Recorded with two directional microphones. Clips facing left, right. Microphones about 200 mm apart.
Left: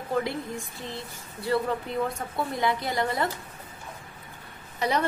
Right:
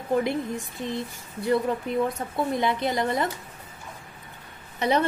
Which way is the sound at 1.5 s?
20° right (ahead or behind).